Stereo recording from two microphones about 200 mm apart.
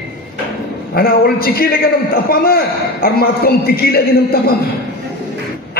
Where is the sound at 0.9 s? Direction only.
50° left (ahead or behind).